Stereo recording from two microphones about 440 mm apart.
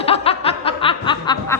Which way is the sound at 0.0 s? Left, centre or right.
Centre.